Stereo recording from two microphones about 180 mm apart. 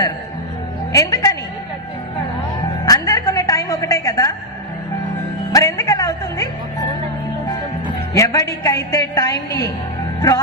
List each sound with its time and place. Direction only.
0.9 s a woman's voice: 20° left (ahead or behind)
2.8 s music: 20° left (ahead or behind)
5.5 s music: 20° left (ahead or behind)
8.1 s a woman's voice: 15° left (ahead or behind)
10.2 s music: 20° left (ahead or behind)